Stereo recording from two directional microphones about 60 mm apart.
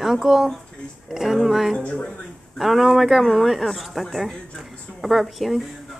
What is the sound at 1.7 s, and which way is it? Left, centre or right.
Speech, left.